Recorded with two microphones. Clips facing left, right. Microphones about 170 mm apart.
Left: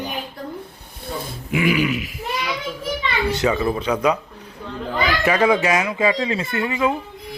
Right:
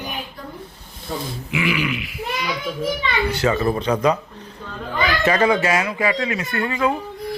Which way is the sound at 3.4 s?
10° left (ahead or behind).